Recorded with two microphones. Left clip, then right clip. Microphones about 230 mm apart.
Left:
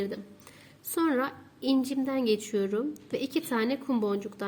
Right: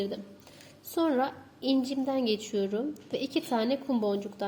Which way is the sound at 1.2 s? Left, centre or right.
Left.